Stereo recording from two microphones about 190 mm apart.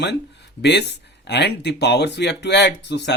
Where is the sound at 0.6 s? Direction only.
65° left (ahead or behind).